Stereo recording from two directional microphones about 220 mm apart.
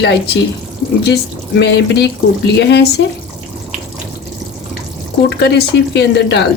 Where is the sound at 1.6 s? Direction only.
50° left (ahead or behind).